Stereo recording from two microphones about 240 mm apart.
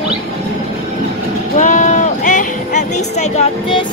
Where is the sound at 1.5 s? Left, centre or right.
Left.